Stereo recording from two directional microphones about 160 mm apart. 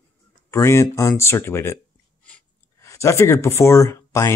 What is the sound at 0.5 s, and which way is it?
Speech, 15° left (ahead or behind).